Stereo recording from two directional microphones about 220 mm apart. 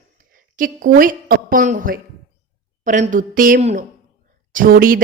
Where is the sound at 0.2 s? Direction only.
40° right (ahead or behind).